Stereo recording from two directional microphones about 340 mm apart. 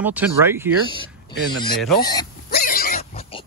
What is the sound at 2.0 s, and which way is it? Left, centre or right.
Speech, centre.